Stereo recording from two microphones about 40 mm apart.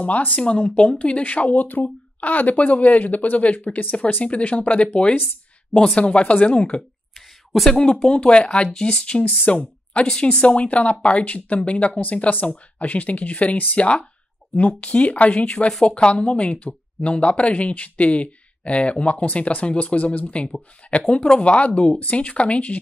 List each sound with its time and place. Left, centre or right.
0.0 s speech: left
1.6 s speech: left
5.9 s speech: left
7.2 s a sound: centre
7.7 s speech: left
15.4 s speech: left
20.9 s speech: left